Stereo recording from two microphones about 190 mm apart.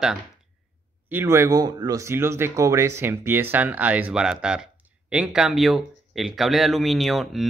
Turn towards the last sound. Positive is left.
turn(degrees=0)  # may be behind; listen again after turning